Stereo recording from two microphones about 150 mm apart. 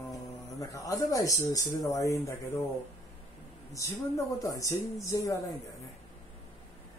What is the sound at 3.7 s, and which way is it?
Speech, 20° left (ahead or behind).